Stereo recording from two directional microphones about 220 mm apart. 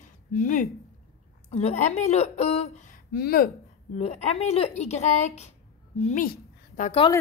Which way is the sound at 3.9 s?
30° left (ahead or behind).